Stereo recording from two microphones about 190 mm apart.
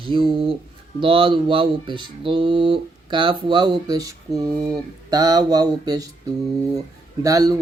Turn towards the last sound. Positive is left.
turn(degrees=-15)  # may be behind; listen again after turning